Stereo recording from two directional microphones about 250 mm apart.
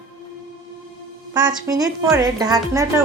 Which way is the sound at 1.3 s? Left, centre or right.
Centre.